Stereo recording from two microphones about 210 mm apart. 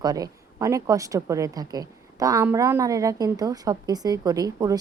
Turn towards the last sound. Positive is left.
turn(degrees=-15)  # may be behind; listen again after turning